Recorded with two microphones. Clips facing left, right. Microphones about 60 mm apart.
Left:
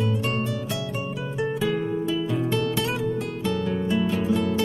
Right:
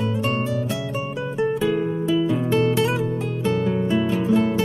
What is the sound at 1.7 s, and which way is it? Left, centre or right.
Music, centre.